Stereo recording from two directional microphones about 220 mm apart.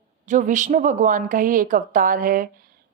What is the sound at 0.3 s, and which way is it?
A woman's voice, 35° right (ahead or behind).